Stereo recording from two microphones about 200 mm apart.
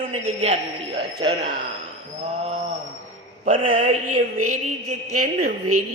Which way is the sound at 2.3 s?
30° right (ahead or behind).